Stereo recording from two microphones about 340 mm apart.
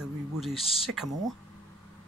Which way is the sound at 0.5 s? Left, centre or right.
Centre.